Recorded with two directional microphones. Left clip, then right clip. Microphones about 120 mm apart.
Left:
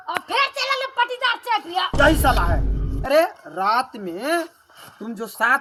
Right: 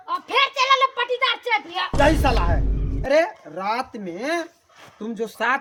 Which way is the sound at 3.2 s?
15° right (ahead or behind).